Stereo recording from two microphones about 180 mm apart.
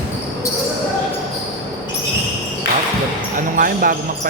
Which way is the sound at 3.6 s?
50° right (ahead or behind).